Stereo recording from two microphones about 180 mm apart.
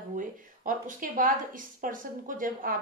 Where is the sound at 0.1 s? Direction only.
45° right (ahead or behind).